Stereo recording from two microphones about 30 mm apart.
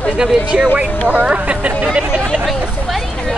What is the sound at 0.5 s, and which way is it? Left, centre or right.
Speech, right.